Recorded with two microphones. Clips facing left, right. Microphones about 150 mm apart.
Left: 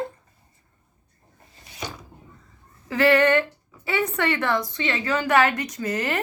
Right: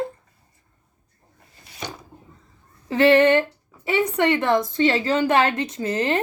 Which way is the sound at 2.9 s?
25° right (ahead or behind).